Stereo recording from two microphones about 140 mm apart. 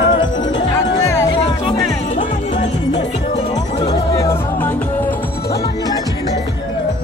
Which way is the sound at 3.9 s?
20° left (ahead or behind).